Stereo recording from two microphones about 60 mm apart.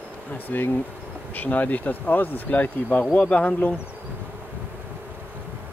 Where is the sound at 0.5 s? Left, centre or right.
Left.